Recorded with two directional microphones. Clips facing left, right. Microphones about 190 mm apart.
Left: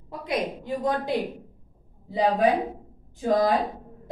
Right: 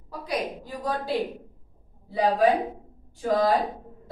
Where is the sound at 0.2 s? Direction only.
25° left (ahead or behind).